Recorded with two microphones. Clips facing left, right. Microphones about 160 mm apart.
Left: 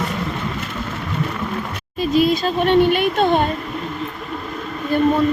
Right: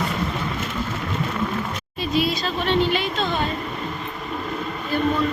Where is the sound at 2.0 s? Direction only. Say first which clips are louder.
Left 7 dB; 45° left (ahead or behind).